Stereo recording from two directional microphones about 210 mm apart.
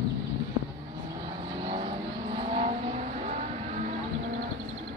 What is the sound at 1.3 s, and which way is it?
Vehicle, 25° right (ahead or behind).